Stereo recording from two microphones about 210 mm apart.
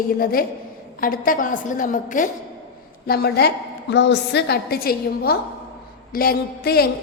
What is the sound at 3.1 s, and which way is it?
A woman's voice, 50° left (ahead or behind).